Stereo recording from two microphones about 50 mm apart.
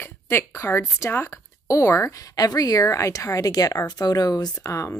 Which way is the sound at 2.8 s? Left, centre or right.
Left.